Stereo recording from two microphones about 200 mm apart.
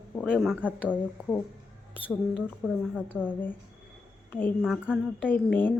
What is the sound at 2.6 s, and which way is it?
Speech, centre (ahead or behind).